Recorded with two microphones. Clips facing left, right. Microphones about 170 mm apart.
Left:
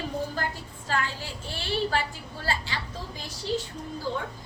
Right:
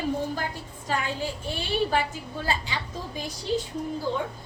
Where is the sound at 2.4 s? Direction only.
15° right (ahead or behind).